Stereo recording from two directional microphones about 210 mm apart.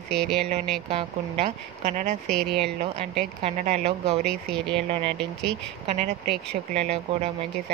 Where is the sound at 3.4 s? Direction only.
30° right (ahead or behind).